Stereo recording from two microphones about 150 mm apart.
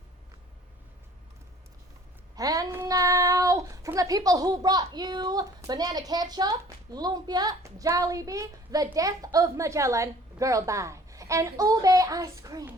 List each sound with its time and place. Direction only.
2.3 s a child's voice: 25° right (ahead or behind)